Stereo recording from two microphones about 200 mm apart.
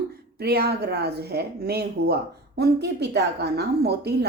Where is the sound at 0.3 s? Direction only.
55° right (ahead or behind).